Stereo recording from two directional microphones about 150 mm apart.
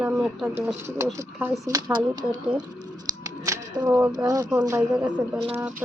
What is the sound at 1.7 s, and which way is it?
Speech, 25° right (ahead or behind).